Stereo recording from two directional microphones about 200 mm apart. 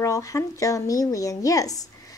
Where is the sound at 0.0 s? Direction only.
15° left (ahead or behind).